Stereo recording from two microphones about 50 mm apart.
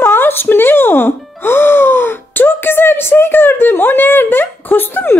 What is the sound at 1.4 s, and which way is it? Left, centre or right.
Gasp, left.